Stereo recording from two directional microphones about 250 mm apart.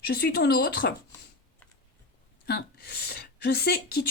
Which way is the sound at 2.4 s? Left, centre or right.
Left.